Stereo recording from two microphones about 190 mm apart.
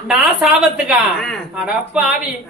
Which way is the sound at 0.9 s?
Centre (ahead or behind).